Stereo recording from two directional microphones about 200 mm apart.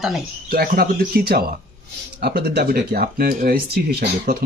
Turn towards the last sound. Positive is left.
turn(degrees=-50)  # may be behind; listen again after turning